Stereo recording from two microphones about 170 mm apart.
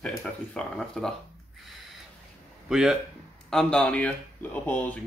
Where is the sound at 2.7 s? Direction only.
Centre (ahead or behind).